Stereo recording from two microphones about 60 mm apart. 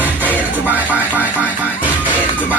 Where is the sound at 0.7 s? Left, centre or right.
Right.